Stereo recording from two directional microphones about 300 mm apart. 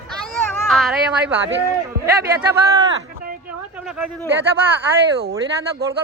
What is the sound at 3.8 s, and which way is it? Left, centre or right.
Speech, centre.